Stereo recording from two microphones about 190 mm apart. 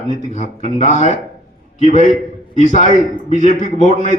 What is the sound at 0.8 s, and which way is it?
Speech, 40° right (ahead or behind).